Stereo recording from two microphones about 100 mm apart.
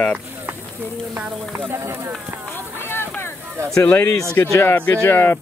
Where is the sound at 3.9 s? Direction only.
30° left (ahead or behind).